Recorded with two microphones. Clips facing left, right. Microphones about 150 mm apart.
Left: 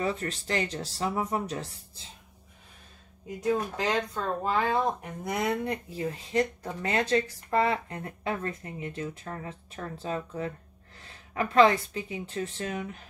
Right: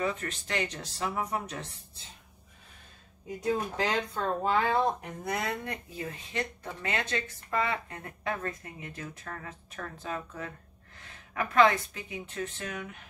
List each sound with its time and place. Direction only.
0.0 s speech: 35° left (ahead or behind)
3.3 s speech: centre (ahead or behind)
5.2 s speech: 20° left (ahead or behind)